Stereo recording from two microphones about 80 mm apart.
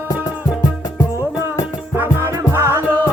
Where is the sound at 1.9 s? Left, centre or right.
Right.